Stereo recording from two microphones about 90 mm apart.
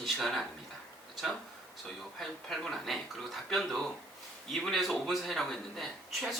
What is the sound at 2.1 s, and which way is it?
Speech, 5° left (ahead or behind).